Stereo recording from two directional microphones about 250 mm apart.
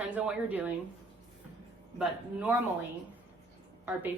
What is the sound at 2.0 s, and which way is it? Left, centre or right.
Speech, centre.